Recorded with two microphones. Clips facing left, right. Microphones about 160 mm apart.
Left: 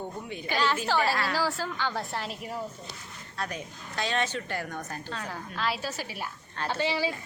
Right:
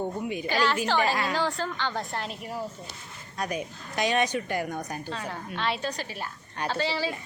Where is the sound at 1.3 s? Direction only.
5° left (ahead or behind).